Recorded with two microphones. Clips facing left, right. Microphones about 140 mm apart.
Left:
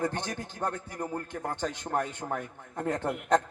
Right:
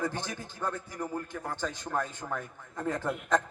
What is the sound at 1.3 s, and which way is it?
A man's voice, 50° left (ahead or behind).